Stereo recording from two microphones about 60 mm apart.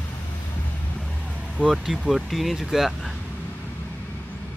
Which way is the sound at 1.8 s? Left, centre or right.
Centre.